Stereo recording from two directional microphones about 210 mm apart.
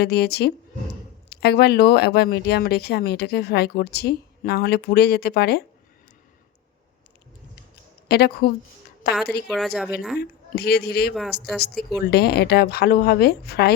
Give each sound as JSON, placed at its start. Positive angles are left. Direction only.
{"t": 0.0, "sound": "speech", "side_deg": 50}
{"t": 8.0, "sound": "speech", "side_deg": 50}
{"t": 9.5, "sound": "a woman's voice", "side_deg": 0}
{"t": 10.2, "sound": "speech", "side_deg": 50}